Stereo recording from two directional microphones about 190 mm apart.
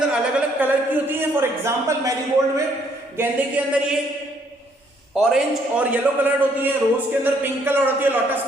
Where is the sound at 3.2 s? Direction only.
10° right (ahead or behind).